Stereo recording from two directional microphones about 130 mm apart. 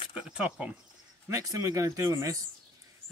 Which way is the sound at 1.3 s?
25° right (ahead or behind).